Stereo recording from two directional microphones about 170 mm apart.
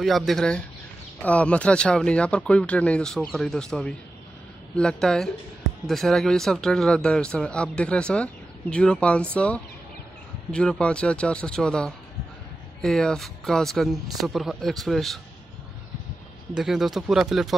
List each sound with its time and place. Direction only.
0.0 s a man's voice: centre (ahead or behind)
16.5 s a man's voice: 5° right (ahead or behind)